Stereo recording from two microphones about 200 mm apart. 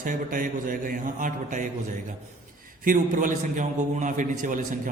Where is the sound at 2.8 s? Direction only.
40° right (ahead or behind).